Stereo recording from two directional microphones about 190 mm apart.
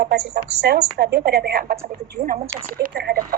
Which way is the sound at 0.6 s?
60° right (ahead or behind).